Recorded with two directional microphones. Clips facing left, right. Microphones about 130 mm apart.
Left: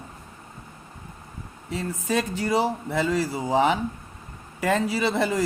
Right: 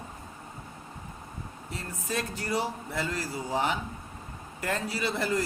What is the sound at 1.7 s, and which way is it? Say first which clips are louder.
Speech: left 8 dB; 90° left.